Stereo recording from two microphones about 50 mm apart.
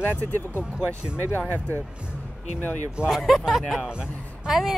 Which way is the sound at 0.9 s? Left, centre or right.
Left.